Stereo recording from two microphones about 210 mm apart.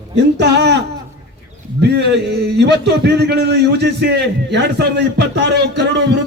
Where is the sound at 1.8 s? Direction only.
55° right (ahead or behind).